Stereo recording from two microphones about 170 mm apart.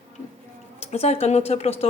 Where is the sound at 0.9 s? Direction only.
40° left (ahead or behind).